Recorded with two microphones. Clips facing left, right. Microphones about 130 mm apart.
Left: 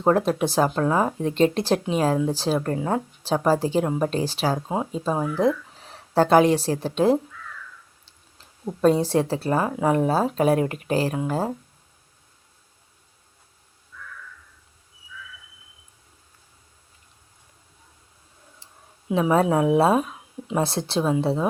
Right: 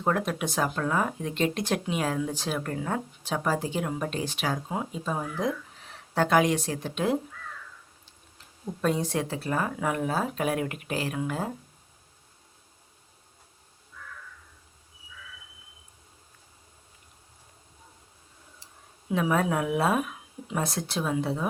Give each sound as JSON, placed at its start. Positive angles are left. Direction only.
{"t": 0.0, "sound": "speech", "side_deg": 30}
{"t": 8.6, "sound": "speech", "side_deg": 35}
{"t": 18.6, "sound": "speech", "side_deg": 25}